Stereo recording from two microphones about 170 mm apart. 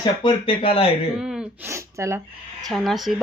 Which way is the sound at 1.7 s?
15° right (ahead or behind).